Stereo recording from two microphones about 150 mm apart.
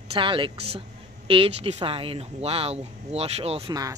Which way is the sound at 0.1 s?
35° right (ahead or behind).